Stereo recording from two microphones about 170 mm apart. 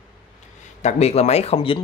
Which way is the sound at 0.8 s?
40° left (ahead or behind).